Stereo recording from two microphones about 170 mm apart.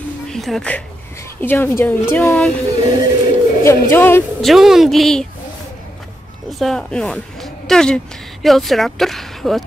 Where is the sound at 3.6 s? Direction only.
15° left (ahead or behind).